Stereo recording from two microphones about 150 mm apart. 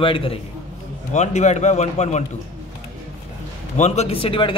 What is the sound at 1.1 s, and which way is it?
A man's voice, 50° left (ahead or behind).